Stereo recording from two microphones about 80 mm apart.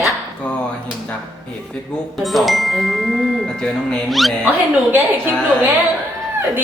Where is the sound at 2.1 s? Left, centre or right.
Centre.